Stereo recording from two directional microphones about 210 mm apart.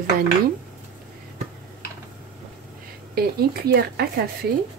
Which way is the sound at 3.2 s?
50° right (ahead or behind).